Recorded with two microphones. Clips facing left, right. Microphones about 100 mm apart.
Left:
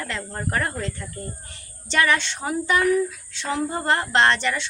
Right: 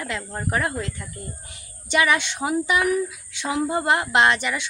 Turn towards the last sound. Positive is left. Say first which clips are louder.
# even
turn(degrees=-10)  # may be behind; listen again after turning